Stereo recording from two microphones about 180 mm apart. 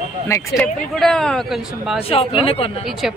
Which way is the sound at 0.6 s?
10° left (ahead or behind).